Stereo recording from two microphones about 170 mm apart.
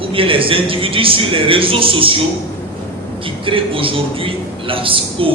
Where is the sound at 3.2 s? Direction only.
30° right (ahead or behind).